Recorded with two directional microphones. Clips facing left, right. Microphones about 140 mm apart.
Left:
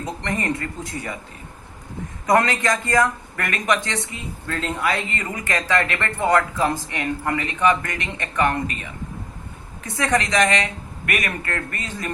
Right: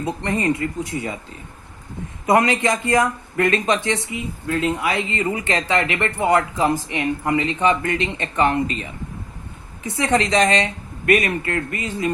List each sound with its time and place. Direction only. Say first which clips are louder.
0.0 s speech: right 4 dB; 20° right (ahead or behind)
2.2 s speech: right 2 dB; 20° right (ahead or behind)